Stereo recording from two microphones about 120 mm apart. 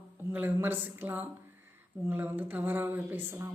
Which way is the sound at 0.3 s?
15° right (ahead or behind).